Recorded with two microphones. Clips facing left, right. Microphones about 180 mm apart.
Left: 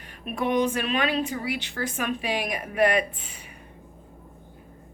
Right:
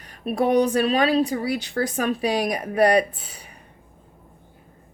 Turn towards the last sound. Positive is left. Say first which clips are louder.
# right 6 dB
turn(degrees=-40)  # may be behind; listen again after turning